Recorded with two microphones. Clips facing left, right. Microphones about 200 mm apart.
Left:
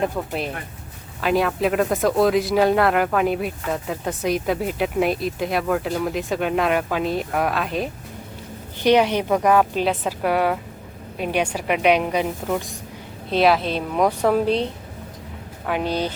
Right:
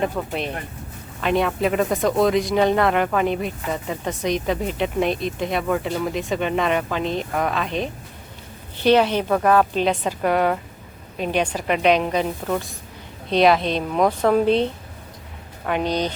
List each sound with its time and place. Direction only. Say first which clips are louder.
0.0 s a woman's voice: even; centre (ahead or behind)